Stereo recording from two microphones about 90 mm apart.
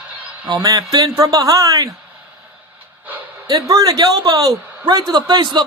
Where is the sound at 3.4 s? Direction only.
40° right (ahead or behind).